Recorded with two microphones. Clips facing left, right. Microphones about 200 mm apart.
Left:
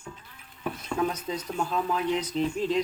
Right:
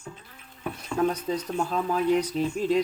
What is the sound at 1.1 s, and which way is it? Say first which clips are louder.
Speech: right 4 dB; 10° right (ahead or behind).